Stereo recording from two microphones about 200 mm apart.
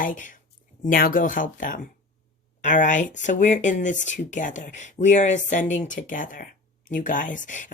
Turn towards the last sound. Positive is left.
turn(degrees=40)  # may be behind; listen again after turning